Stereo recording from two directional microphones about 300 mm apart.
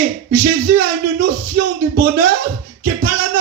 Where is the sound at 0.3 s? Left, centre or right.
Right.